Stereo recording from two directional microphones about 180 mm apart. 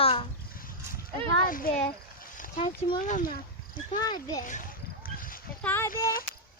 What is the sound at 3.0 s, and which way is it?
Speech, 50° left (ahead or behind).